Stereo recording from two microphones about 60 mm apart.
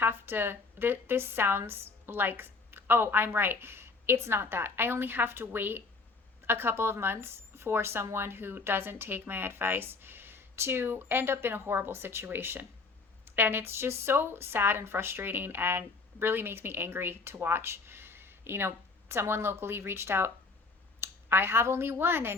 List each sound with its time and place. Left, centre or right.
0.0 s a woman's voice: right